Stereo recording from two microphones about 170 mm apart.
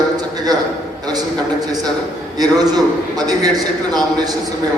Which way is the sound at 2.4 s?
25° right (ahead or behind).